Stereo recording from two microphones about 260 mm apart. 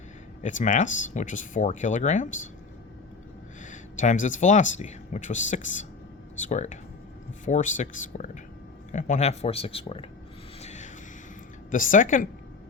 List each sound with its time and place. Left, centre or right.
0.4 s speech: left
3.6 s speech: left
10.6 s a sound: left
11.7 s speech: left